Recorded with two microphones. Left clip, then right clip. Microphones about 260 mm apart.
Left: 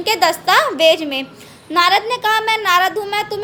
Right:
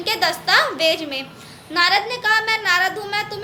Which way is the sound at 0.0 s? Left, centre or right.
Left.